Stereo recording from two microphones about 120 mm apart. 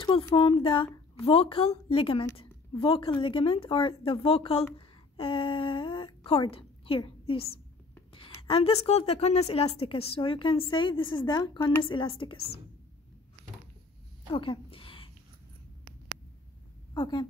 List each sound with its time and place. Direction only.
0.4 s a woman's voice: 50° left (ahead or behind); by 11.7 s 35° left (ahead or behind)
11.8 s speech: 45° left (ahead or behind)
14.3 s a sound: 45° left (ahead or behind)
16.9 s a woman's voice: 35° left (ahead or behind)